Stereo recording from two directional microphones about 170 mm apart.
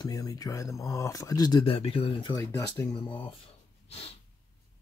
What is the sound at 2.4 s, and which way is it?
Speech, 15° left (ahead or behind).